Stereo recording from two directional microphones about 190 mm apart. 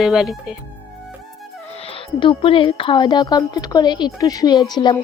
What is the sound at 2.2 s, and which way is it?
A woman's voice, 25° left (ahead or behind).